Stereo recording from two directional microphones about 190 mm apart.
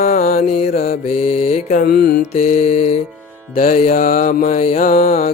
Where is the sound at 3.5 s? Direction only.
45° left (ahead or behind).